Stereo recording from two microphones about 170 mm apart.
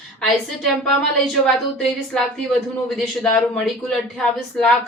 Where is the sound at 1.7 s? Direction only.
5° left (ahead or behind).